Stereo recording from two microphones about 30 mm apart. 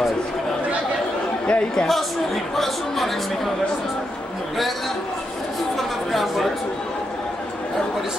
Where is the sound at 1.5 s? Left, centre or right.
Left.